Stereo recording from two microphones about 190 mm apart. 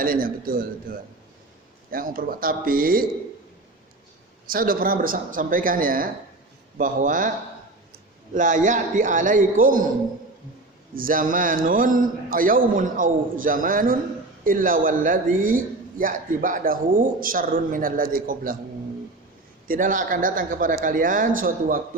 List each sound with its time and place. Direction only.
0.0 s speech: 50° right (ahead or behind)
4.4 s speech: 50° right (ahead or behind)
8.3 s speech: 40° right (ahead or behind)
10.9 s speech: 45° right (ahead or behind)
19.6 s speech: 45° right (ahead or behind)